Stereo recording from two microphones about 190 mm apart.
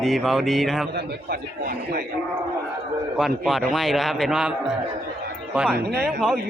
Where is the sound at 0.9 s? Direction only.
55° right (ahead or behind).